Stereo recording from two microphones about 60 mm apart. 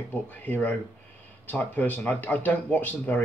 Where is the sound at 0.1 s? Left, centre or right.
Left.